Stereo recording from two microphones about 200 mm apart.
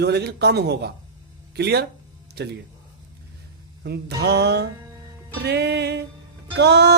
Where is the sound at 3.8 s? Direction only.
55° right (ahead or behind).